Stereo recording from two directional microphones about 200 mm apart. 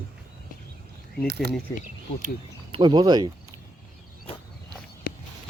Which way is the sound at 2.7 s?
25° right (ahead or behind).